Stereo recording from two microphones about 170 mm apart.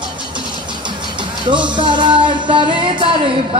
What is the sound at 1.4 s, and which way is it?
Music, 25° right (ahead or behind).